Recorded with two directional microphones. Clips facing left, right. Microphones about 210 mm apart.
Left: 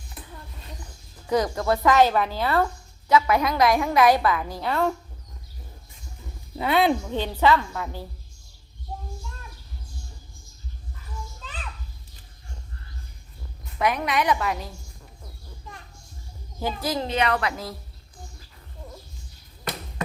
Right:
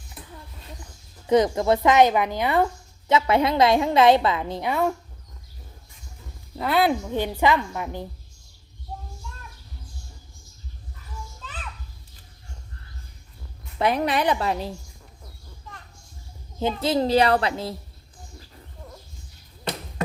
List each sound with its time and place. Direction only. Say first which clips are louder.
1.3 s a woman's voice: right 4 dB; 20° right (ahead or behind)
4.7 s a woman's voice: even; 10° right (ahead or behind)
6.6 s a woman's voice: even; centre (ahead or behind); by 8.0 s 20° right (ahead or behind)
13.7 s a woman's voice: right 2 dB; 30° right (ahead or behind)
16.6 s a woman's voice: right 5 dB; 25° right (ahead or behind)